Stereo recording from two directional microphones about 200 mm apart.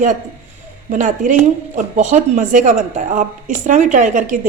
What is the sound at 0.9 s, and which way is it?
A woman's voice, 40° right (ahead or behind).